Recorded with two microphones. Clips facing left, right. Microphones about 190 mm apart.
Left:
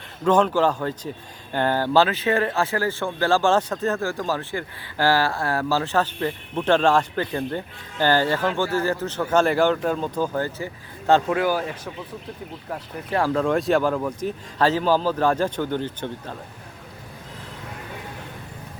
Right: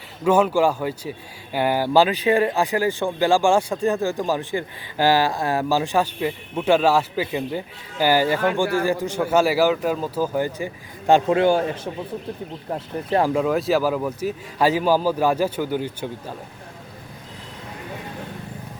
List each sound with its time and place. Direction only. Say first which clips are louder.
0.3 s speech: right 1 dB; 10° right (ahead or behind)
11.3 s a man's voice: right 5 dB; 25° right (ahead or behind)
13.3 s speech: even; 5° right (ahead or behind)